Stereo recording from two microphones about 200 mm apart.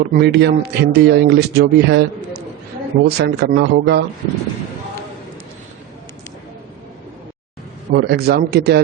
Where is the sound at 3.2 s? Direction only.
55° right (ahead or behind).